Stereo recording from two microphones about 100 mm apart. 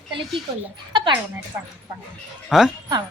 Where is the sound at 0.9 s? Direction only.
50° right (ahead or behind).